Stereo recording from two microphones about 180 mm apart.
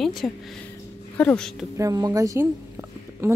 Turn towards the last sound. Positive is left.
turn(degrees=-15)  # may be behind; listen again after turning